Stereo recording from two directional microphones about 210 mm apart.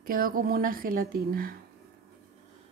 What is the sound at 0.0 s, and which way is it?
A woman's voice, 45° right (ahead or behind).